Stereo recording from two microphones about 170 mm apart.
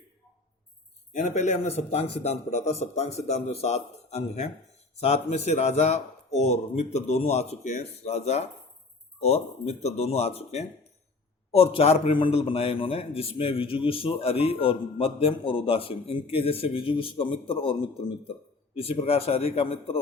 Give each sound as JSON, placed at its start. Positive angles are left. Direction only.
{"t": 1.1, "sound": "a man's voice", "side_deg": 40}